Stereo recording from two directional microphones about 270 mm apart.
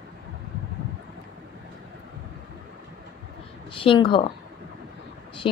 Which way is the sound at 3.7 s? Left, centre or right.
Centre.